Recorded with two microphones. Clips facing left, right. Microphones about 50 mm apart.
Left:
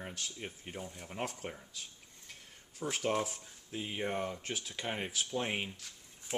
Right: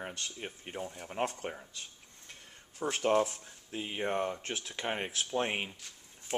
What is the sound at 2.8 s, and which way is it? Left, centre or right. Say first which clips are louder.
Speech: right 3 dB; right.